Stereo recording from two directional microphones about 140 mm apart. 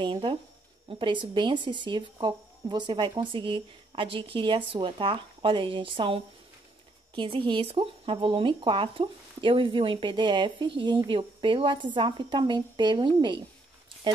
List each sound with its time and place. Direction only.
0.0 s speech: 35° right (ahead or behind)